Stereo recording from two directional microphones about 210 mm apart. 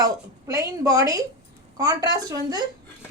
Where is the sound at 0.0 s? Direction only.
15° right (ahead or behind).